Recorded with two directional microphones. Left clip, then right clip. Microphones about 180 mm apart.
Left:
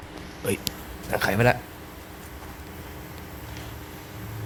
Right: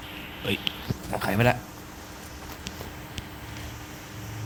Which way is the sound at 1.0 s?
5° left (ahead or behind).